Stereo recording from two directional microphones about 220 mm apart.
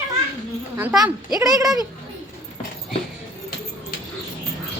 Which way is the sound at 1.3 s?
15° right (ahead or behind).